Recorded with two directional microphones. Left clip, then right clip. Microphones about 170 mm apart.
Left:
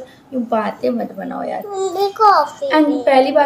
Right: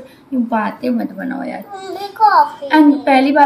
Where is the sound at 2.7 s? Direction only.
10° left (ahead or behind).